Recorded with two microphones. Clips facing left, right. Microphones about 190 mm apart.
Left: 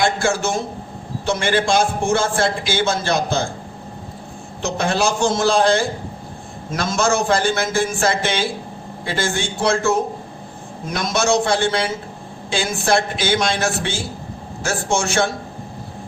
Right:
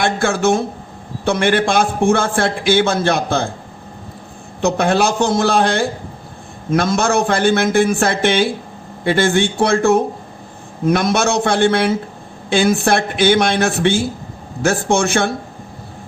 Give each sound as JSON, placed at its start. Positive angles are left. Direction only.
{"t": 0.0, "sound": "a man's voice", "side_deg": -55}
{"t": 4.6, "sound": "a man's voice", "side_deg": -60}